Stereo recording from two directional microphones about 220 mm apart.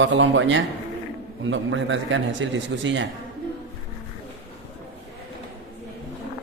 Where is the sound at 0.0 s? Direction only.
60° right (ahead or behind).